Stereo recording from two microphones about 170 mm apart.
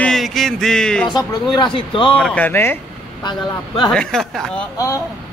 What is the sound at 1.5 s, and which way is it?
Speech, 30° left (ahead or behind).